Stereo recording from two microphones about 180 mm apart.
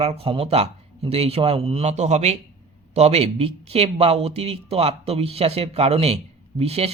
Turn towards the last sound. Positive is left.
turn(degrees=-35)  # may be behind; listen again after turning